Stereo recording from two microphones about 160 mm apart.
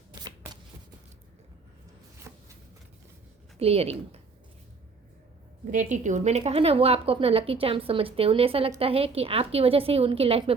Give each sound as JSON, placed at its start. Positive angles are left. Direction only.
{"t": 0.1, "sound": "shuffling cards", "side_deg": -25}
{"t": 2.3, "sound": "shuffling cards", "side_deg": -15}
{"t": 3.6, "sound": "a woman's voice", "side_deg": -40}
{"t": 5.7, "sound": "a woman's voice", "side_deg": -50}